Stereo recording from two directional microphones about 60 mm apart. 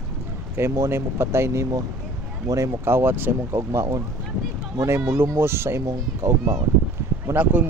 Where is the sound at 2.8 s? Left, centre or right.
Right.